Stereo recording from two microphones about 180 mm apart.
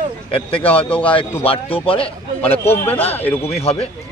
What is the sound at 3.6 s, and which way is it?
Speech, 35° left (ahead or behind).